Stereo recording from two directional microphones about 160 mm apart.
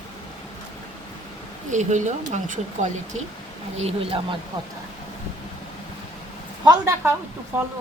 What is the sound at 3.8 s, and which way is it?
Speech, 40° right (ahead or behind).